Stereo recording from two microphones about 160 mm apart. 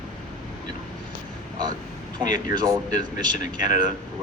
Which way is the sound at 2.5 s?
25° right (ahead or behind).